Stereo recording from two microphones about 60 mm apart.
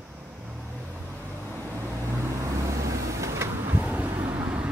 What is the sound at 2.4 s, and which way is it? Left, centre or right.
Vehicle, right.